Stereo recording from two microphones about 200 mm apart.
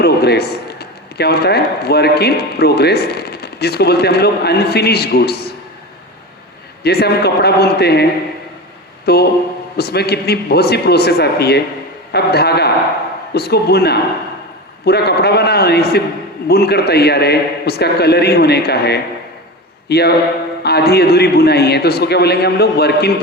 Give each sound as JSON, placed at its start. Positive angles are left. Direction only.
{"t": 0.0, "sound": "a man's voice", "side_deg": 55}
{"t": 6.8, "sound": "a man's voice", "side_deg": 55}
{"t": 9.0, "sound": "a man's voice", "side_deg": 55}